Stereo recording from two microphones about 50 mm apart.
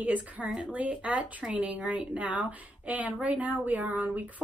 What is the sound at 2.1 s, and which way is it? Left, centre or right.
Speech, right.